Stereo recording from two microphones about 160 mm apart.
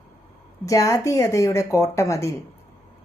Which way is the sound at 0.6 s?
20° left (ahead or behind).